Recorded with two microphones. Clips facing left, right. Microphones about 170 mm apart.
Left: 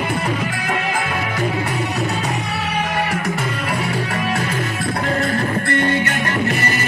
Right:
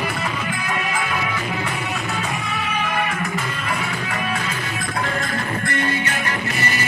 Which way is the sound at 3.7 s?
40° left (ahead or behind).